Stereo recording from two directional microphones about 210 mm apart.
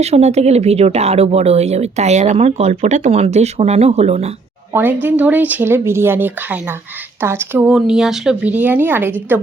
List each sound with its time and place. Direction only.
0.0 s speech: 30° right (ahead or behind)
4.7 s speech: 10° right (ahead or behind)